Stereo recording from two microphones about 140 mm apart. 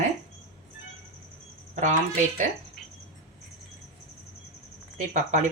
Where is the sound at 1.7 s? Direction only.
60° right (ahead or behind).